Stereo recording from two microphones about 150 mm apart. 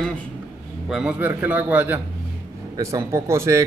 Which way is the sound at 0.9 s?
5° right (ahead or behind).